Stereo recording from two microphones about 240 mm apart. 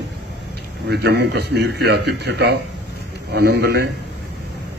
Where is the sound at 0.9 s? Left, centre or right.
Right.